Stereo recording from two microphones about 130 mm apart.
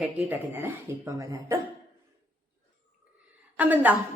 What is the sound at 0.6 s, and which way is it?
Speech, 20° right (ahead or behind).